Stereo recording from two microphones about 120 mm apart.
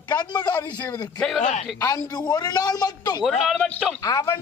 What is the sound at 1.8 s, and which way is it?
A man's voice, 35° left (ahead or behind).